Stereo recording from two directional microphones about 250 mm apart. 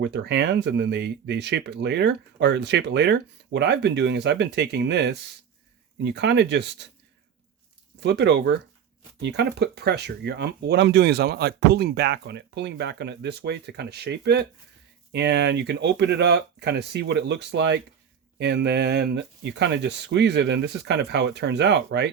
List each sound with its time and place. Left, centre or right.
0.0 s speech: right
8.0 s speech: right